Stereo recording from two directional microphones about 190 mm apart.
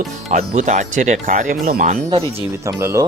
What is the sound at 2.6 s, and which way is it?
Speech, 15° right (ahead or behind).